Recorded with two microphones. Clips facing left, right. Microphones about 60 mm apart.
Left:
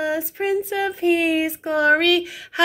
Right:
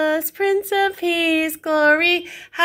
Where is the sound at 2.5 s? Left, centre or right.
Right.